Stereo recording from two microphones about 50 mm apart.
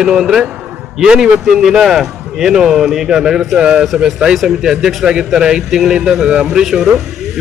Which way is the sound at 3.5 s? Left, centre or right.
Centre.